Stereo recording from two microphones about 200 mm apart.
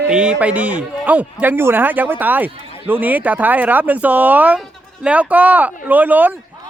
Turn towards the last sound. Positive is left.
turn(degrees=-10)  # may be behind; listen again after turning